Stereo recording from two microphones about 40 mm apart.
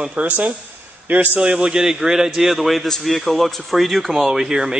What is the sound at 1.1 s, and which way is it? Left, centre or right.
Speech, right.